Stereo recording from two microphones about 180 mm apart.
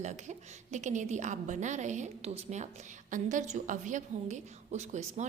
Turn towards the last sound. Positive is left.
turn(degrees=-40)  # may be behind; listen again after turning